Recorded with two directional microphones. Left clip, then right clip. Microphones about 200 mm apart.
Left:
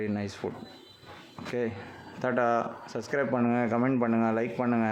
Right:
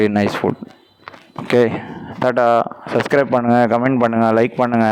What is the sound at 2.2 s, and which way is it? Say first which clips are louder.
Speech: right 13 dB; 45° right (ahead or behind).